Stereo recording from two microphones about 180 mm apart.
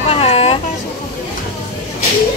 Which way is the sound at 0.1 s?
35° left (ahead or behind).